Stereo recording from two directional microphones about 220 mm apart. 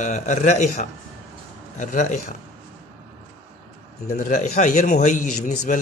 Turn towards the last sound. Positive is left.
turn(degrees=35)  # may be behind; listen again after turning